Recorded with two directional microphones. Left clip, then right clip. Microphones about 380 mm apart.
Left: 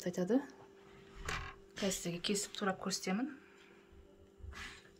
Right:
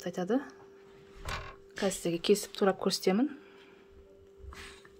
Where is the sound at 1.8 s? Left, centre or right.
Centre.